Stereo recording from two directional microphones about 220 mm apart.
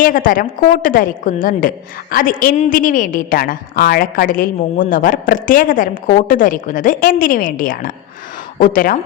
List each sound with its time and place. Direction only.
0.0 s a woman's voice: 40° left (ahead or behind)